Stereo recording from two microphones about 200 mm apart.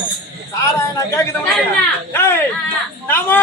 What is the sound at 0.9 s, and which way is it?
A man's voice, 15° left (ahead or behind).